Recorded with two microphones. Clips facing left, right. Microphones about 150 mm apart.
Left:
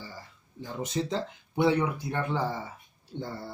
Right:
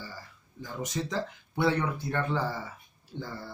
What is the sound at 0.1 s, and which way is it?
Speech, 25° left (ahead or behind).